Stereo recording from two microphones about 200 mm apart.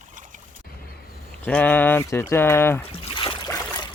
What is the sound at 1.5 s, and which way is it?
Speech, 10° left (ahead or behind).